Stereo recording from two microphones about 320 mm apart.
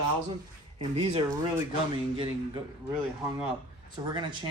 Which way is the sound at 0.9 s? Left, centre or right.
Centre.